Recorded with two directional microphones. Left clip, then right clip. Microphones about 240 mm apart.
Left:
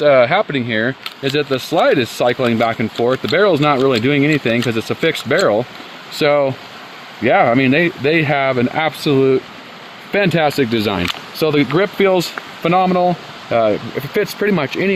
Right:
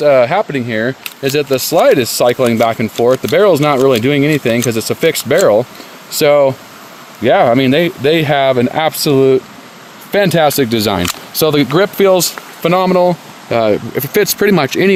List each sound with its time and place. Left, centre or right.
0.0 s speech: right